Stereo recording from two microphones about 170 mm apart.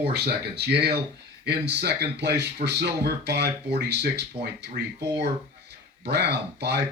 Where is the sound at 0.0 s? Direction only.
70° right (ahead or behind).